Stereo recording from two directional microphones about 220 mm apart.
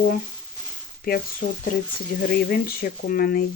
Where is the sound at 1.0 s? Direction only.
40° left (ahead or behind).